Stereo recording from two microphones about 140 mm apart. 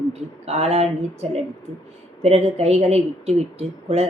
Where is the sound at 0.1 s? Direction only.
50° right (ahead or behind).